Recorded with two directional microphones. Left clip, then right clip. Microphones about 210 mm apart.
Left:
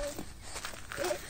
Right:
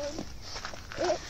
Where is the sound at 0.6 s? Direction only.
60° left (ahead or behind).